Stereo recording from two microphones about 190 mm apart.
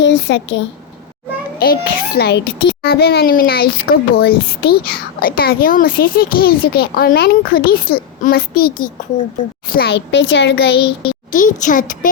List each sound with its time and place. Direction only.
0.0 s speech: 70° left (ahead or behind)
1.5 s a child's voice: 55° left (ahead or behind)
11.1 s a child's voice: 45° left (ahead or behind)